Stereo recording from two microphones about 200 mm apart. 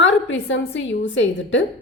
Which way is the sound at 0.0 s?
65° left (ahead or behind).